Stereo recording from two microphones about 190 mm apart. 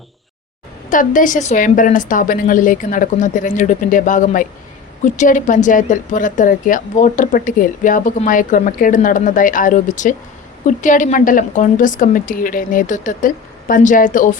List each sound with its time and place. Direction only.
0.9 s speech: 45° left (ahead or behind)